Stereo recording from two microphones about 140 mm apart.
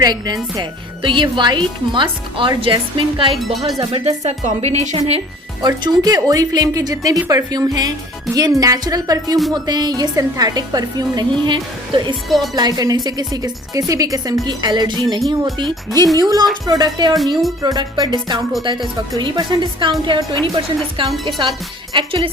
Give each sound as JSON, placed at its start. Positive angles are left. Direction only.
{"t": 0.0, "sound": "speech", "side_deg": -30}
{"t": 3.3, "sound": "speech", "side_deg": 0}
{"t": 3.8, "sound": "speech", "side_deg": -45}
{"t": 5.6, "sound": "speech", "side_deg": -30}